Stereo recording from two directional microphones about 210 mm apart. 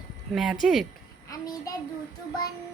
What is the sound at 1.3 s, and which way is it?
Child singing, 15° left (ahead or behind).